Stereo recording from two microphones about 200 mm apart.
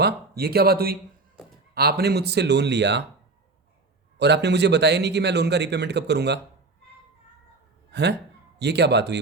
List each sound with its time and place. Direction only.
0.0 s a man's voice: 50° right (ahead or behind)
4.2 s a man's voice: 60° right (ahead or behind)
7.9 s a sound: 60° right (ahead or behind)
8.5 s a man's voice: 55° right (ahead or behind)